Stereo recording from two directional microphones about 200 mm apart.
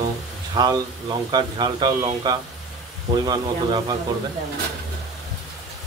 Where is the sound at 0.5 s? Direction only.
20° right (ahead or behind).